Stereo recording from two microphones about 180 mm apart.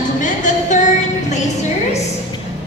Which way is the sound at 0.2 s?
45° left (ahead or behind).